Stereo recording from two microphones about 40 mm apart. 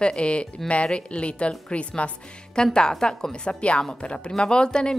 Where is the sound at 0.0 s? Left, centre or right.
Left.